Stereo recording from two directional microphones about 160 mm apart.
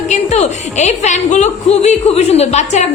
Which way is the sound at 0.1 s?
45° left (ahead or behind).